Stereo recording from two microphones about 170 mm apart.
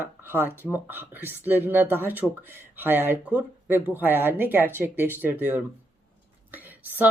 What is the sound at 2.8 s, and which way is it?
Speech, 10° right (ahead or behind).